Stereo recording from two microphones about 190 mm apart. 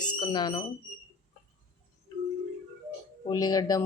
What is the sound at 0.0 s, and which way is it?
Speech, 20° left (ahead or behind).